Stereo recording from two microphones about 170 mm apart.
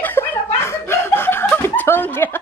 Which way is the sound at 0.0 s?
10° left (ahead or behind).